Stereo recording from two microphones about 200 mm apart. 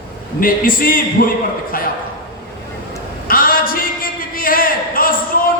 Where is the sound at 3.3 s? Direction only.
45° left (ahead or behind).